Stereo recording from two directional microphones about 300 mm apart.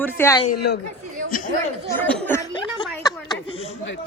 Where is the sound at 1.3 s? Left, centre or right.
Left.